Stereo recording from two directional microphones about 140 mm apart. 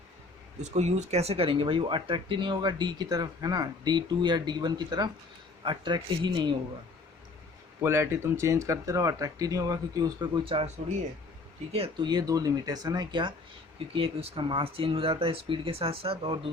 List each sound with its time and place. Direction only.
0.6 s speech: 55° right (ahead or behind); by 6.6 s 35° right (ahead or behind)
7.8 s speech: 20° right (ahead or behind); by 10.7 s 40° right (ahead or behind)
11.7 s speech: 45° right (ahead or behind)
12.0 s speech: 30° right (ahead or behind)